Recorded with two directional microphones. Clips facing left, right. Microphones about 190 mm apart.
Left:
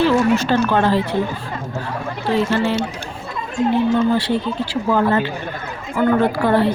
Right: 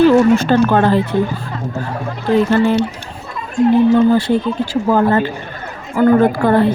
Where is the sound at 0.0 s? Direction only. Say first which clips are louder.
Right 6 dB; 50° right (ahead or behind).